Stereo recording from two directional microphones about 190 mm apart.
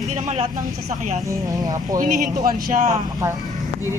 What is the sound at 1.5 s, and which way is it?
Speech, 20° right (ahead or behind).